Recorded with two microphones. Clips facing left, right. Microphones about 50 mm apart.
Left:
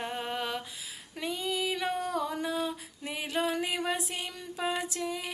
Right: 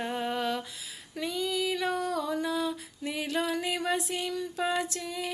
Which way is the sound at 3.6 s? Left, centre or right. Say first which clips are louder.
Right 2 dB; centre.